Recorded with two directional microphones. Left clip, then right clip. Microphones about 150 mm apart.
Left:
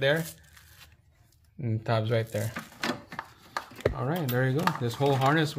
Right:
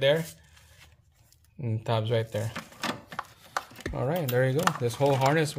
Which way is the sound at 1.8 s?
10° right (ahead or behind).